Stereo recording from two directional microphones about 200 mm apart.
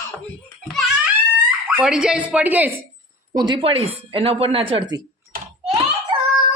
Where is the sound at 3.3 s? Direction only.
20° right (ahead or behind).